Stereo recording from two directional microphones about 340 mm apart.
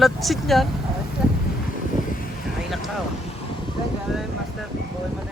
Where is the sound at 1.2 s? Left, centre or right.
Centre.